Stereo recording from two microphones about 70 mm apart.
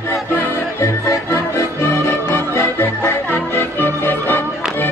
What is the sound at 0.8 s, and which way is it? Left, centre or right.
Music, left.